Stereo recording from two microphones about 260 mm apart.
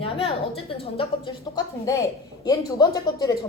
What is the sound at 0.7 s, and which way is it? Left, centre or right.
A woman's voice, left.